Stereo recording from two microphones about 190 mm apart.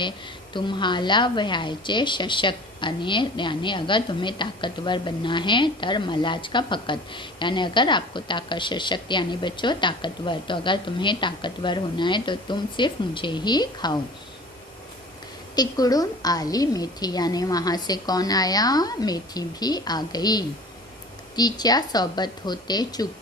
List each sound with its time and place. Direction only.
0.5 s a woman's voice: 25° left (ahead or behind)
15.5 s a woman's voice: 20° left (ahead or behind)